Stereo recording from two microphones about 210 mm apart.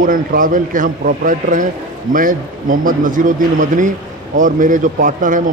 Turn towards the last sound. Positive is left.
turn(degrees=-40)  # may be behind; listen again after turning